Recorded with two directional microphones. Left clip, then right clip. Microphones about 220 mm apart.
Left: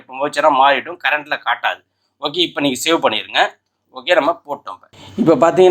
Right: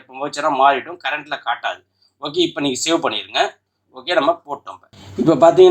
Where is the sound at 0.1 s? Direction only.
30° left (ahead or behind).